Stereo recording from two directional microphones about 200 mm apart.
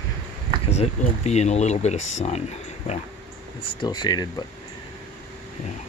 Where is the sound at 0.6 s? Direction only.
30° left (ahead or behind).